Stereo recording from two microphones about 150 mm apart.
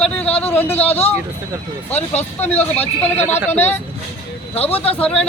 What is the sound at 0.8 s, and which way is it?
Speech, 45° left (ahead or behind).